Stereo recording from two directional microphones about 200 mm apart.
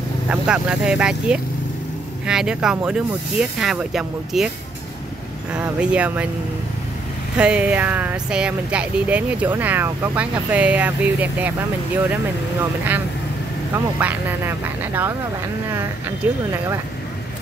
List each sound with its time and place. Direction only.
0.3 s speech: 5° right (ahead or behind)
5.5 s speech: 5° right (ahead or behind)
7.3 s speech: 5° right (ahead or behind)
13.7 s speech: 10° right (ahead or behind)
16.2 s speech: 10° right (ahead or behind)